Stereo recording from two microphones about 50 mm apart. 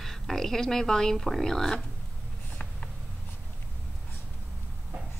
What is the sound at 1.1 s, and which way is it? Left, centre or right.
Speech, centre.